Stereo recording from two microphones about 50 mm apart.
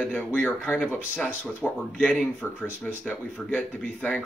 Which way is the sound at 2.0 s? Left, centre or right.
Left.